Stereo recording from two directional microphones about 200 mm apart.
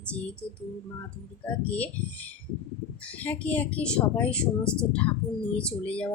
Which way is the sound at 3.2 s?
10° left (ahead or behind).